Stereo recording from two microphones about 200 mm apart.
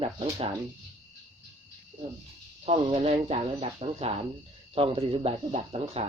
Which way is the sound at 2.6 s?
30° right (ahead or behind).